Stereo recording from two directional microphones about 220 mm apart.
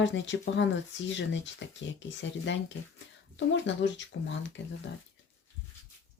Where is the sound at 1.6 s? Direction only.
60° left (ahead or behind).